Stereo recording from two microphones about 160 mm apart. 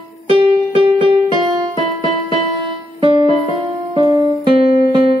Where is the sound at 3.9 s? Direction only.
25° right (ahead or behind).